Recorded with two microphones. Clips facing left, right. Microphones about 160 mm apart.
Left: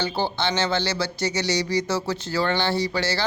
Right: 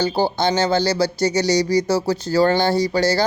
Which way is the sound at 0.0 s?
40° right (ahead or behind).